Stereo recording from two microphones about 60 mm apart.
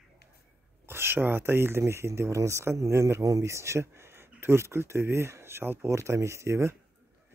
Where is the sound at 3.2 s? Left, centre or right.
Right.